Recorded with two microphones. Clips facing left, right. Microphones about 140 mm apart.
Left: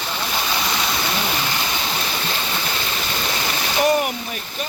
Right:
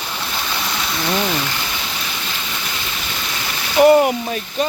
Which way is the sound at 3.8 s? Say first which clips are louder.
Right 8 dB; 25° right (ahead or behind).